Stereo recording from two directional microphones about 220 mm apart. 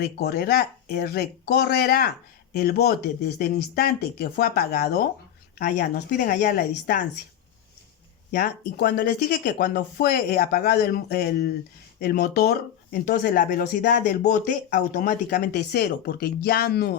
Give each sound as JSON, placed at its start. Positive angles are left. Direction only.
{"t": 0.0, "sound": "speech", "side_deg": 45}
{"t": 8.3, "sound": "speech", "side_deg": 45}